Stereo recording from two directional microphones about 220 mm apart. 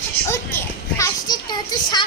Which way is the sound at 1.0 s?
20° left (ahead or behind).